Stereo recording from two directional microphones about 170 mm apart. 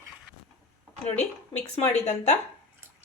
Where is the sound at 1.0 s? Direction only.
40° left (ahead or behind).